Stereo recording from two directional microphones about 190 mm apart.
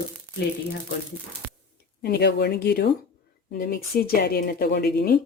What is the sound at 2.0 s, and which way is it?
Speech, 55° left (ahead or behind).